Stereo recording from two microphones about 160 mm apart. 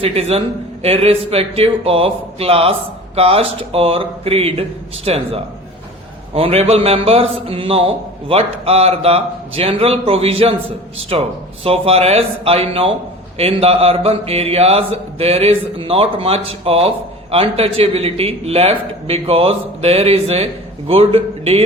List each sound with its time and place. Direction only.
0.0 s a man's voice: 40° right (ahead or behind)